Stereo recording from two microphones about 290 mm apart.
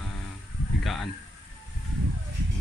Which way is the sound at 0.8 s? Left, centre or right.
Centre.